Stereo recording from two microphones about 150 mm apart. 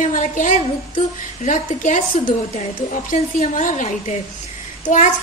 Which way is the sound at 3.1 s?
60° left (ahead or behind).